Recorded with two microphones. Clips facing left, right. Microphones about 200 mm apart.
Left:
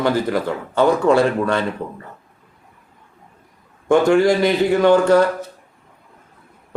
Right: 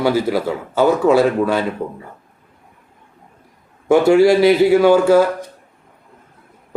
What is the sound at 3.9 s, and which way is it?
A man's voice, 10° right (ahead or behind).